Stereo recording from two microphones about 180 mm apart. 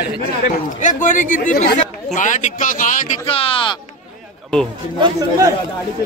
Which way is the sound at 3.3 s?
30° left (ahead or behind).